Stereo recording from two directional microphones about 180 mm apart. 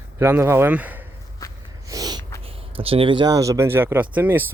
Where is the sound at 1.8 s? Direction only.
20° right (ahead or behind).